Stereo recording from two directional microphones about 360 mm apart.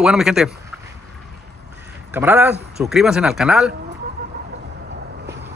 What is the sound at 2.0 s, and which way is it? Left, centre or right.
A man's voice, centre.